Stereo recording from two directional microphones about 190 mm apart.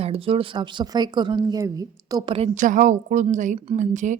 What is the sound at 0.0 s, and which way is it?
A woman's voice, 30° right (ahead or behind).